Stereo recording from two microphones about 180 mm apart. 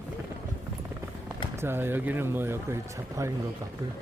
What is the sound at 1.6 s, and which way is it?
Speech, 10° right (ahead or behind).